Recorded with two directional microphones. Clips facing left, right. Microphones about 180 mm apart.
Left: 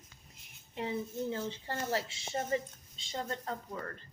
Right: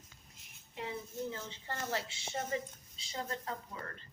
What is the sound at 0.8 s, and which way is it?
Speech, 30° left (ahead or behind).